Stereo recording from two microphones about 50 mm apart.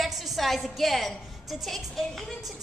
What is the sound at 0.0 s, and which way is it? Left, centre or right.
A woman's voice, centre.